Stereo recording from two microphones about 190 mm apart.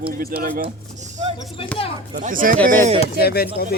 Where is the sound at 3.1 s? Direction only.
55° left (ahead or behind).